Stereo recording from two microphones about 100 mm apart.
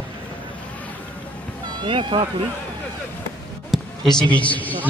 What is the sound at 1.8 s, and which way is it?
Speech, 55° right (ahead or behind).